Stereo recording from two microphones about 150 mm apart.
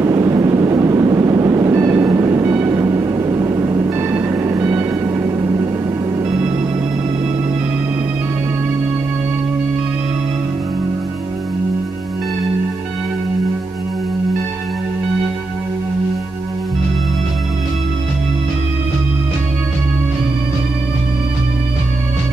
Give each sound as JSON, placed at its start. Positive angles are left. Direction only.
{"t": 0.0, "sound": "vehicle", "side_deg": -20}